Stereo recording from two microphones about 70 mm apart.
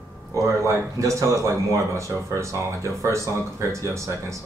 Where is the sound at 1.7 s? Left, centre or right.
Right.